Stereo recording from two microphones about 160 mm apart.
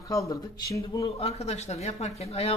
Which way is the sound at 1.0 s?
40° left (ahead or behind).